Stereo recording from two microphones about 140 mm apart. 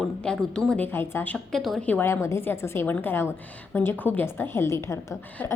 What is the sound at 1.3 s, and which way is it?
A woman's voice, centre (ahead or behind).